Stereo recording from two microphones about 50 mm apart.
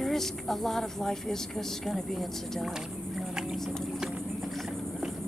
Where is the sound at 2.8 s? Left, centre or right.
Centre.